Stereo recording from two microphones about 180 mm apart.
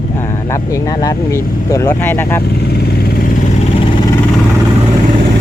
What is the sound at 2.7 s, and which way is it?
Vehicle, 60° left (ahead or behind).